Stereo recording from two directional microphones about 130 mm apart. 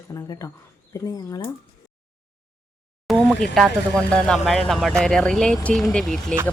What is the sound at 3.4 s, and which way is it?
Speech, centre (ahead or behind).